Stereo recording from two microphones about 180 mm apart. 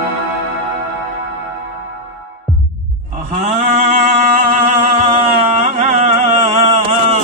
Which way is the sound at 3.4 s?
40° right (ahead or behind).